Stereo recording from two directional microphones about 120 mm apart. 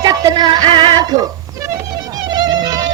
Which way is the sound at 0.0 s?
30° right (ahead or behind).